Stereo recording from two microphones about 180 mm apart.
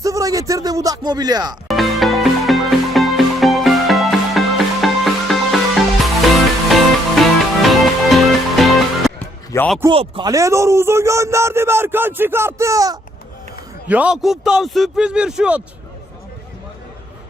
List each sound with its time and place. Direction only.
0.0 s speech: 20° right (ahead or behind)
1.6 s music: centre (ahead or behind)
9.5 s a man's voice: 15° left (ahead or behind)
9.9 s speech: 30° right (ahead or behind)
13.8 s a man's voice: 10° right (ahead or behind)